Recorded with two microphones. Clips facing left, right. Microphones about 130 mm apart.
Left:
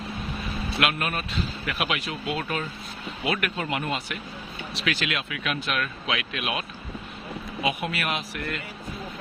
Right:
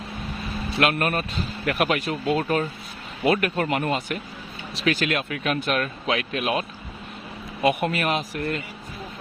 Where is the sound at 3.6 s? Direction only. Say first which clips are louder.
Right 5 dB; 50° right (ahead or behind).